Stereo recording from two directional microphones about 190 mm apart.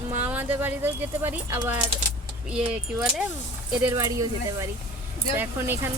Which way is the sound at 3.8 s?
15° right (ahead or behind).